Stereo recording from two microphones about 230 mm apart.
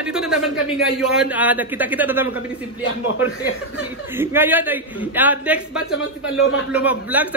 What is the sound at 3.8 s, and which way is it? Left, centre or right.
A man's voice, centre.